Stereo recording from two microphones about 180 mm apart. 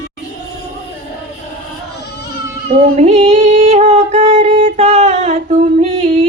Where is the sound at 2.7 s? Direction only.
40° right (ahead or behind).